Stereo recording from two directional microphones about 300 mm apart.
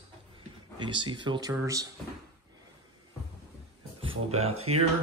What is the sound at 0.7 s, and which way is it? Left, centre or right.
Speech, centre.